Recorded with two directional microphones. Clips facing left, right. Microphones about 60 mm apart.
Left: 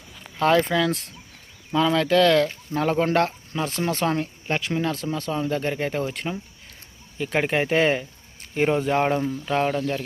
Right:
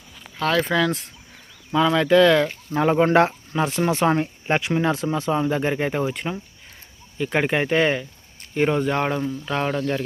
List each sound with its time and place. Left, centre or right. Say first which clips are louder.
0.3 s speech: left 3 dB; centre
0.6 s speech: right 1 dB; centre